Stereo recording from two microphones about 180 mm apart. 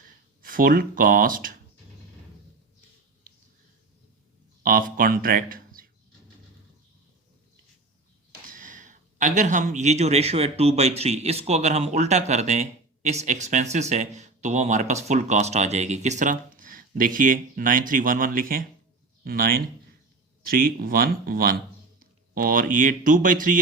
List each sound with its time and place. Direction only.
0.4 s speech: 50° right (ahead or behind)
4.6 s speech: 50° right (ahead or behind)
8.4 s speech: 50° right (ahead or behind)